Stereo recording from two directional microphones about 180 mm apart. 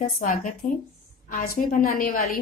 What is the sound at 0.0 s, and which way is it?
A woman's voice, 45° left (ahead or behind).